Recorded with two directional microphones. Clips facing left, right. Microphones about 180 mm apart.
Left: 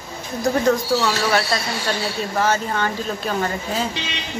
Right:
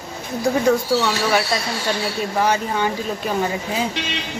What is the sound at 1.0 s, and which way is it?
Speech, 10° right (ahead or behind).